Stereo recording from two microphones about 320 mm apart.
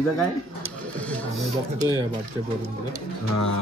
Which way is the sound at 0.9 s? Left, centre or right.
Centre.